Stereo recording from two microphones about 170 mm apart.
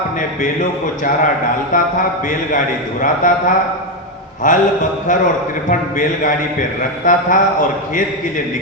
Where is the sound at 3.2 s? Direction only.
50° left (ahead or behind).